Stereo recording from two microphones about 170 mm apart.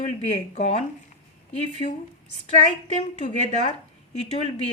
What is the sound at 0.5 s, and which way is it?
Speech, 40° left (ahead or behind).